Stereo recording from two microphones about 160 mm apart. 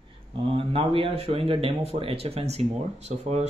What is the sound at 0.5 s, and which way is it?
Speech, 35° right (ahead or behind).